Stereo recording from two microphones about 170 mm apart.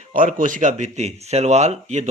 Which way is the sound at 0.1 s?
50° right (ahead or behind).